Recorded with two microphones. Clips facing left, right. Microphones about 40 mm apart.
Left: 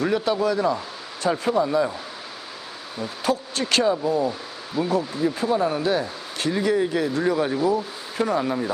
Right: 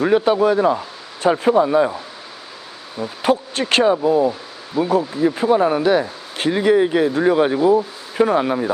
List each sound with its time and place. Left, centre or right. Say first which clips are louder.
0.1 s speech: right 7 dB; right
3.2 s speech: right 6 dB; right
4.8 s speech: right 5 dB; centre
5.1 s speech: right 6 dB; right